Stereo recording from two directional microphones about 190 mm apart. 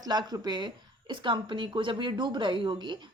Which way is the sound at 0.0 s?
20° right (ahead or behind).